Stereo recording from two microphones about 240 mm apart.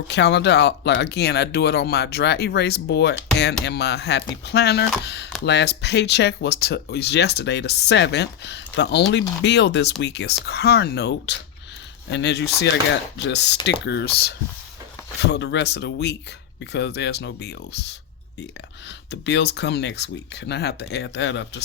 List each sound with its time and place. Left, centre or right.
0.1 s speech: left
19.1 s speech: left